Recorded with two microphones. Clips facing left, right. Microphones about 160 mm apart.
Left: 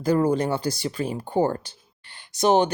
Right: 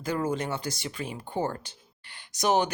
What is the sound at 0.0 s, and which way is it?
Speech, 35° left (ahead or behind).